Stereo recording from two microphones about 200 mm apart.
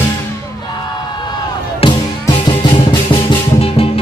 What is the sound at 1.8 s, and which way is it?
Music, 25° left (ahead or behind).